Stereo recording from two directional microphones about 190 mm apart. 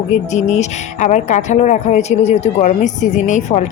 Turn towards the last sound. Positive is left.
turn(degrees=40)  # may be behind; listen again after turning